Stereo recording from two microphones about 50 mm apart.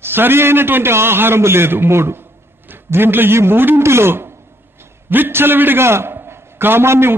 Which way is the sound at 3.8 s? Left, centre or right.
Right.